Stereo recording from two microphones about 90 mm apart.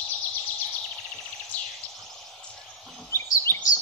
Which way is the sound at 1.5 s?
20° left (ahead or behind).